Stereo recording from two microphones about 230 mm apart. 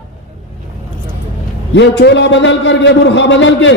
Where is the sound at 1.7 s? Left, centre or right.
Left.